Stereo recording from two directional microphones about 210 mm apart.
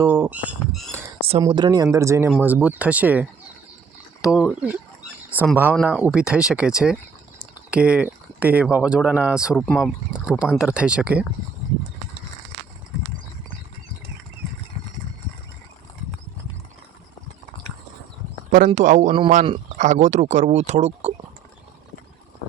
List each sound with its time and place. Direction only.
0.0 s speech: 10° right (ahead or behind)
1.4 s speech: 20° right (ahead or behind)
18.5 s speech: 35° right (ahead or behind)